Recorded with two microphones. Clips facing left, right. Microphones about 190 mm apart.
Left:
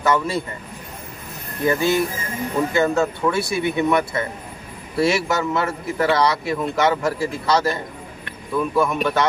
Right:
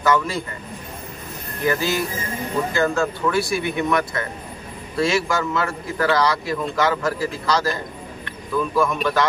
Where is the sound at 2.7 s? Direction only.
20° left (ahead or behind).